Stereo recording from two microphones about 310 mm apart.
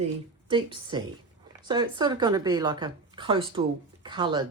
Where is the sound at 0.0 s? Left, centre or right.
Centre.